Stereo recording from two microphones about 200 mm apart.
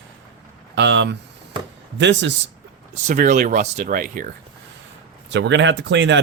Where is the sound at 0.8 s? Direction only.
60° right (ahead or behind).